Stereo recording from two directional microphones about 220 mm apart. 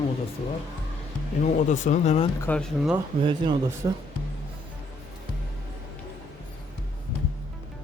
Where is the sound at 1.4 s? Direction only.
35° left (ahead or behind).